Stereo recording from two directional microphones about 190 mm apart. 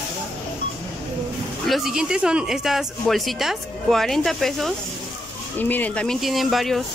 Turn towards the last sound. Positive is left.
turn(degrees=0)  # may be behind; listen again after turning